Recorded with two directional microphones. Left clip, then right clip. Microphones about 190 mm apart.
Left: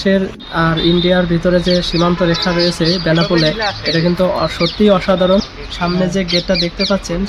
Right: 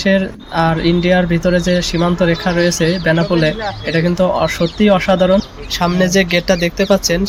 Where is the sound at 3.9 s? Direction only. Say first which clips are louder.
Right 2 dB; 5° right (ahead or behind).